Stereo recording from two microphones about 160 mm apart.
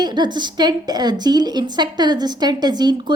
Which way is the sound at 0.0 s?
25° right (ahead or behind).